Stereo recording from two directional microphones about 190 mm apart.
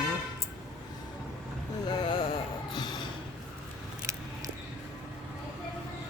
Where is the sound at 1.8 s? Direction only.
20° left (ahead or behind).